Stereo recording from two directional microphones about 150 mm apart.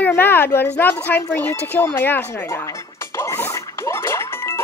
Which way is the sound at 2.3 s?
15° left (ahead or behind).